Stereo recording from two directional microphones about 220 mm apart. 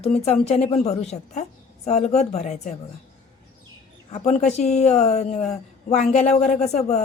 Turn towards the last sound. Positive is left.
turn(degrees=30)  # may be behind; listen again after turning